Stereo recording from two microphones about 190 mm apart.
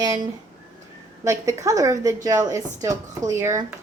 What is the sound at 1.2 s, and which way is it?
Speech, 15° right (ahead or behind).